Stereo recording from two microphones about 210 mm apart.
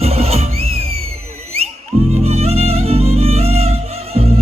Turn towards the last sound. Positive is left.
turn(degrees=-30)  # may be behind; listen again after turning